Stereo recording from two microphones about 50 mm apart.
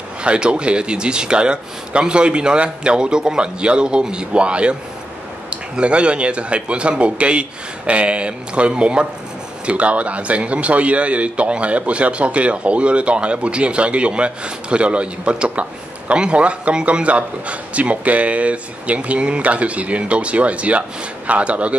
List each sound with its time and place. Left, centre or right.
0.2 s a man's voice: right